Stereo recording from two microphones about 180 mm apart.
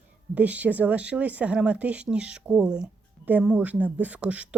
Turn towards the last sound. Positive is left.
turn(degrees=-5)  # may be behind; listen again after turning